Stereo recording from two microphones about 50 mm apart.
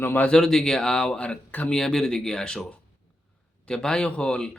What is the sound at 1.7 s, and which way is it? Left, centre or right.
Speech, centre.